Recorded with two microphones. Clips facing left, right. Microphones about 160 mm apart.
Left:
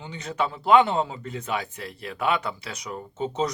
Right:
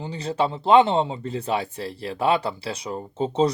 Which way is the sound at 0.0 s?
30° right (ahead or behind).